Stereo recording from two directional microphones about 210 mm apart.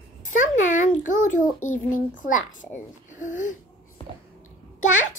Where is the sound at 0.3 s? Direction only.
40° left (ahead or behind).